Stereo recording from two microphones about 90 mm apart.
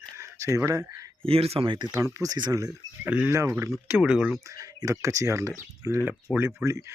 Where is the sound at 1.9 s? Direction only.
40° right (ahead or behind).